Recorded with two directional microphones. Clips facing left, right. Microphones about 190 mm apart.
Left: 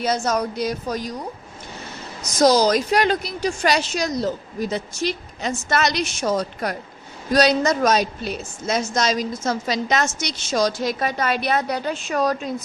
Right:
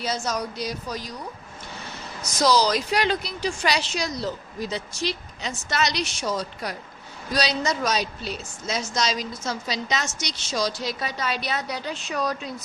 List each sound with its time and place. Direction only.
0.0 s a woman's voice: 55° left (ahead or behind)
2.4 s a woman's voice: 45° left (ahead or behind)